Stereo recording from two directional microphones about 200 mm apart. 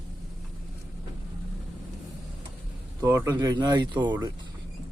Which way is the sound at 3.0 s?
15° right (ahead or behind).